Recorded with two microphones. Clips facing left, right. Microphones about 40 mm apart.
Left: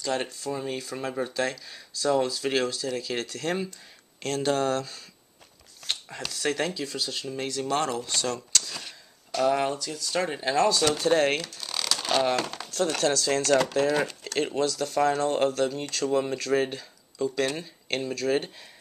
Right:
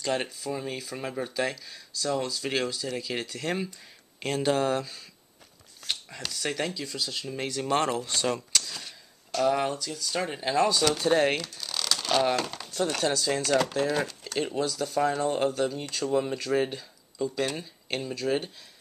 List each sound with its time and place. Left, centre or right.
0.0 s speech: centre
0.4 s speech: centre
1.7 s speech: centre
5.9 s speech: centre
7.3 s speech: centre
8.7 s a sound: left
9.4 s speech: centre
11.6 s a sound: centre
12.3 s speech: centre